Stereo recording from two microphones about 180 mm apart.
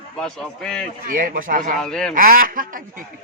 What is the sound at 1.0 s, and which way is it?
Speech, 50° right (ahead or behind).